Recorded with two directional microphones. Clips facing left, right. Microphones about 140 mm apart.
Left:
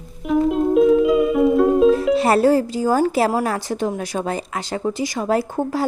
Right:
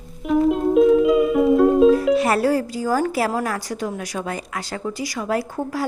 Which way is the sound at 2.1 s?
30° left (ahead or behind).